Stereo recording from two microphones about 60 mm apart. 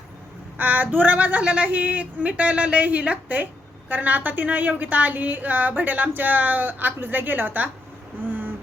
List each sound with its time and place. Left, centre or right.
0.6 s a woman's voice: right